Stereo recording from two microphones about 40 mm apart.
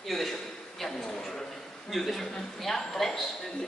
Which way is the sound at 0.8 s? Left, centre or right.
Centre.